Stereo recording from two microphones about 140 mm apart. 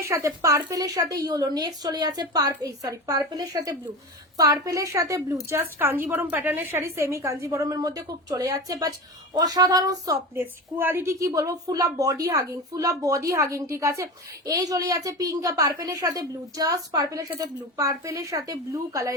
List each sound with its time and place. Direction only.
0.0 s a woman's voice: 20° right (ahead or behind)
10.3 s a woman's voice: 15° right (ahead or behind)